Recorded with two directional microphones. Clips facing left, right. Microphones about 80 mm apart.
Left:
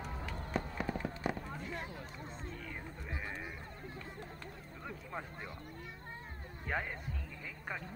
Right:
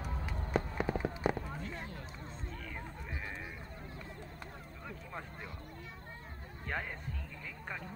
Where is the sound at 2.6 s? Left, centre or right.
Centre.